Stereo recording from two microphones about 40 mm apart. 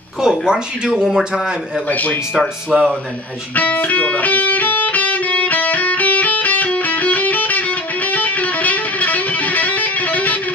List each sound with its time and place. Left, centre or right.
0.2 s speech: centre
1.0 s speech: centre
1.9 s speech: left
2.7 s speech: right
3.5 s music: left